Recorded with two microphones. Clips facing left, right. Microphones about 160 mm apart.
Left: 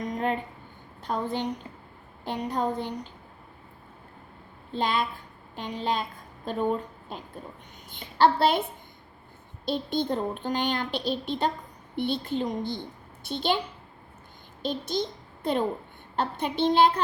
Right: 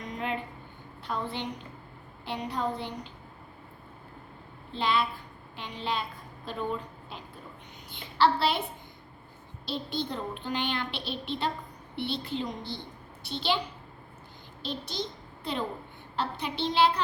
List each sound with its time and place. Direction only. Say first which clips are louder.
0.0 s a sound: left 6 dB; 45° left (ahead or behind)
1.0 s a woman's voice: left 5 dB; 45° left (ahead or behind)
4.7 s a woman's voice: left 1 dB; 45° left (ahead or behind)
9.6 s a woman's voice: left 6 dB; 50° left (ahead or behind)
14.6 s a child's voice: left 6 dB; 45° left (ahead or behind)